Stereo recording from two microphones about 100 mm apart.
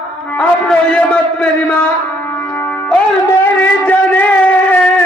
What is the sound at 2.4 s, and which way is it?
Music, 15° left (ahead or behind).